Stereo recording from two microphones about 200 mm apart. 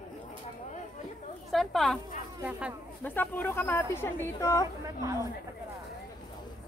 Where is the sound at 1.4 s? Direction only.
Centre (ahead or behind).